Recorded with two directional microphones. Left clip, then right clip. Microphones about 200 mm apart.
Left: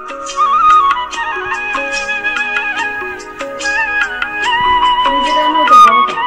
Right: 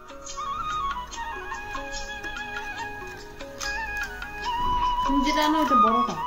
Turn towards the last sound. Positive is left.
turn(degrees=35)  # may be behind; listen again after turning